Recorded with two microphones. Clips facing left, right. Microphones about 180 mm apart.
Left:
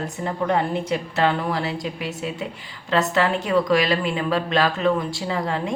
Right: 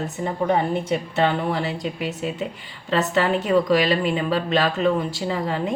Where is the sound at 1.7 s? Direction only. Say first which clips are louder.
Right 1 dB; centre (ahead or behind).